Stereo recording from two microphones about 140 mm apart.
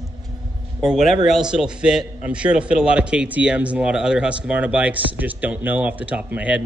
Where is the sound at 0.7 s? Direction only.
Centre (ahead or behind).